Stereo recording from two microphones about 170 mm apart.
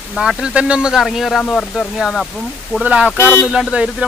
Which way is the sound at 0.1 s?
Centre (ahead or behind).